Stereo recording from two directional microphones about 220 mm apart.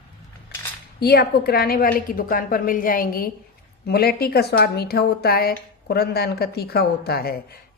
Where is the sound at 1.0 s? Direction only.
45° left (ahead or behind).